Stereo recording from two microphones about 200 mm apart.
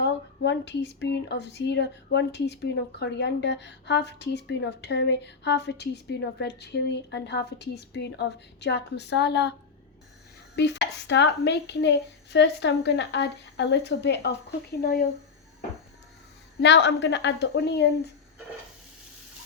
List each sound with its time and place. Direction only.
0.0 s speech: 60° left (ahead or behind)
16.6 s speech: 60° left (ahead or behind)